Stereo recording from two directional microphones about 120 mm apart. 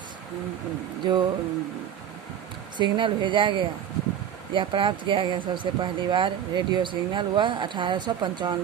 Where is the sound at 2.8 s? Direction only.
40° right (ahead or behind).